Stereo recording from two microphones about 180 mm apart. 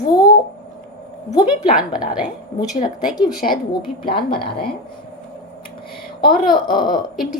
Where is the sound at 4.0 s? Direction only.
55° left (ahead or behind).